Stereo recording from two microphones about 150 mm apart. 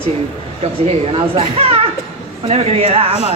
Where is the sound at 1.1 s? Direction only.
40° right (ahead or behind).